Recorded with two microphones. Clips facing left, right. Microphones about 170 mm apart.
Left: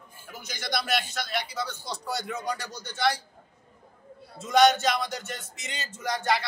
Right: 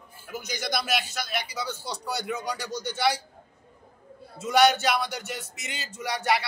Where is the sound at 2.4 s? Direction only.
70° right (ahead or behind).